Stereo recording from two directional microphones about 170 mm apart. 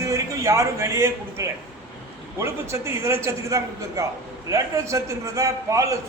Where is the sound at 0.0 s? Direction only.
20° right (ahead or behind).